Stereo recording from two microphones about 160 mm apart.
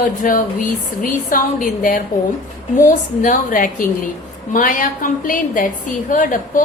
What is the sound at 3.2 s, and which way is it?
A woman's voice, 55° left (ahead or behind).